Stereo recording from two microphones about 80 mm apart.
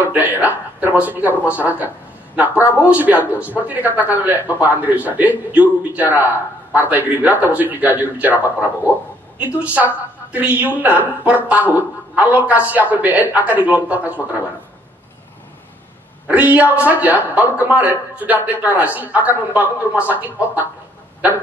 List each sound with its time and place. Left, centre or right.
0.0 s speech: right
9.6 s speech: centre
16.3 s speech: centre